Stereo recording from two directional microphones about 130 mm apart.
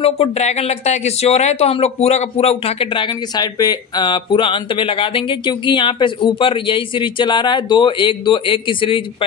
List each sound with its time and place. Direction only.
0.0 s speech: 55° left (ahead or behind)